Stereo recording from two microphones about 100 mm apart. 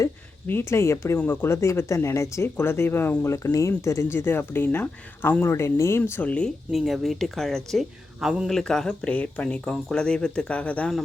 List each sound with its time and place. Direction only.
0.0 s speech: 25° left (ahead or behind)
6.1 s speech: 20° left (ahead or behind)
6.7 s speech: centre (ahead or behind); by 10.9 s 15° left (ahead or behind)